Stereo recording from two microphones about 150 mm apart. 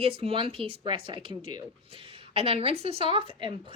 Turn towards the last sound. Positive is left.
turn(degrees=-35)  # may be behind; listen again after turning